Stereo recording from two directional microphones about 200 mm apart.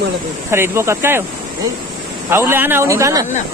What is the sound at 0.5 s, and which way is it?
Speech, 15° right (ahead or behind).